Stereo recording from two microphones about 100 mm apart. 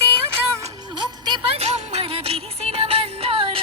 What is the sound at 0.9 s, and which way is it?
Music, 50° right (ahead or behind).